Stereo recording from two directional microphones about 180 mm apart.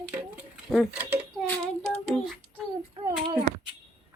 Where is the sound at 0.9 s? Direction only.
10° right (ahead or behind).